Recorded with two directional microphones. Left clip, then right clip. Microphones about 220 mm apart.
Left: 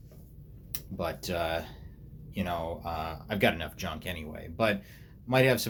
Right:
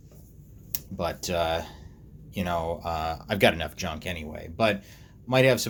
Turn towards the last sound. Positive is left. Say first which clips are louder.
# right 4 dB
turn(degrees=-15)  # may be behind; listen again after turning